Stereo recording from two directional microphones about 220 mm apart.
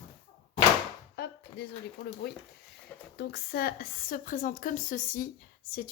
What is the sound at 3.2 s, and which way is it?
Speech, 45° left (ahead or behind).